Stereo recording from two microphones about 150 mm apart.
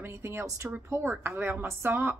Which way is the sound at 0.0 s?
15° right (ahead or behind).